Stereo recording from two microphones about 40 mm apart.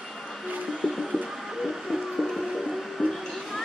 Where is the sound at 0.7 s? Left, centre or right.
Centre.